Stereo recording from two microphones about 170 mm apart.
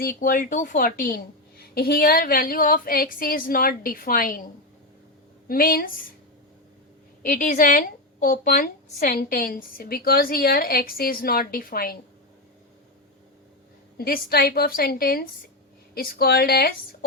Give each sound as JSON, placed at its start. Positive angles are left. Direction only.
{"t": 0.0, "sound": "speech", "side_deg": 60}
{"t": 5.5, "sound": "speech", "side_deg": 60}
{"t": 7.2, "sound": "speech", "side_deg": 50}
{"t": 14.0, "sound": "speech", "side_deg": 65}